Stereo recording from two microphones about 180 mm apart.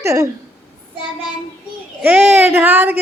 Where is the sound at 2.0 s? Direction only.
10° right (ahead or behind).